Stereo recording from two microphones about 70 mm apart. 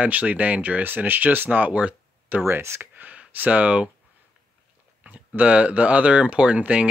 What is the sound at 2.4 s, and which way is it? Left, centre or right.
Speech, right.